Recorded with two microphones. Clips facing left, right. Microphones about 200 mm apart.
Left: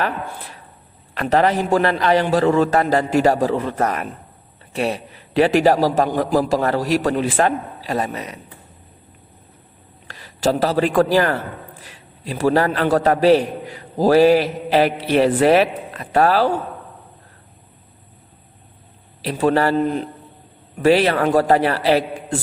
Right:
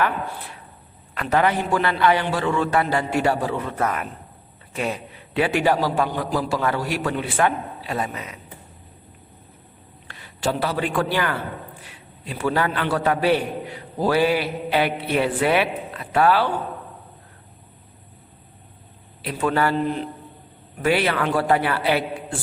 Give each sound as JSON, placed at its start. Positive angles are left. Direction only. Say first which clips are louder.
{"t": 1.2, "sound": "a man's voice", "louder": "left 4 dB", "side_deg": 35}
{"t": 10.1, "sound": "a man's voice", "louder": "left 6 dB", "side_deg": 40}
{"t": 19.2, "sound": "a man's voice", "louder": "left 5 dB", "side_deg": 35}